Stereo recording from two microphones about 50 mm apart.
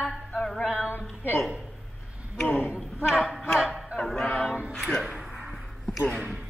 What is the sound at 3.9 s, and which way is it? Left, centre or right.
Choir, centre.